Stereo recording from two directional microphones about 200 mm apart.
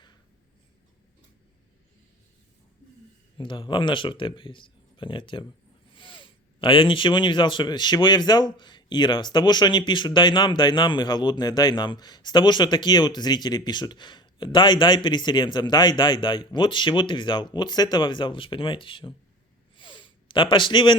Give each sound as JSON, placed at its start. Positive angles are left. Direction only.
{"t": 3.3, "sound": "speech", "side_deg": 25}
{"t": 19.7, "sound": "sniff", "side_deg": 25}